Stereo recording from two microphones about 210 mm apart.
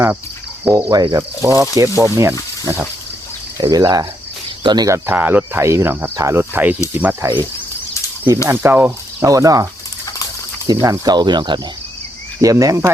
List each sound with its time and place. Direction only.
0.6 s speech: 15° right (ahead or behind)
8.4 s speech: 10° right (ahead or behind)
10.7 s speech: 15° right (ahead or behind)